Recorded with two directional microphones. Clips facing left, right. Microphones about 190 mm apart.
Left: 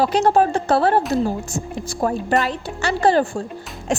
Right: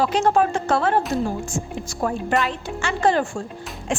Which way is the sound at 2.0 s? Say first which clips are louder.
Left 2 dB; 35° left (ahead or behind).